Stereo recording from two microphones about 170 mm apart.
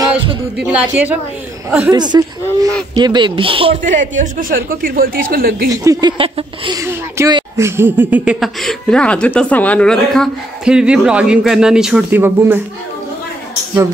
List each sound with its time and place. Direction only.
0.6 s speech: 5° right (ahead or behind)
2.0 s speech: 25° right (ahead or behind)
3.8 s a man's voice: 50° right (ahead or behind)
5.7 s speech: 20° right (ahead or behind)
6.7 s speech: 15° right (ahead or behind)